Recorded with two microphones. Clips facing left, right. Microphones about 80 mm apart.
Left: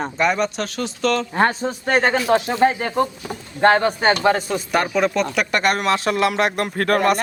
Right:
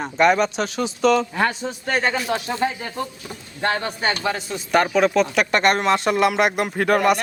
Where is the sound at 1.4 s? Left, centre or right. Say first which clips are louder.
Left 3 dB; left.